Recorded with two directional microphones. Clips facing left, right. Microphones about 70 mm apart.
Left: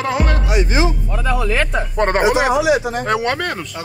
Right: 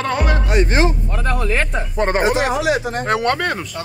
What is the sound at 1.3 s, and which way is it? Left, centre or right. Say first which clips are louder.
Speech: left 2 dB; left.